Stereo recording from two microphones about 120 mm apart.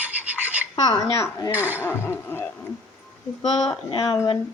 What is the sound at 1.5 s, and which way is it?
Speech, 15° right (ahead or behind).